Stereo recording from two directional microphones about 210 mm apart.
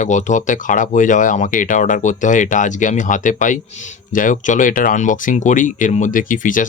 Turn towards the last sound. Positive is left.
turn(degrees=40)  # may be behind; listen again after turning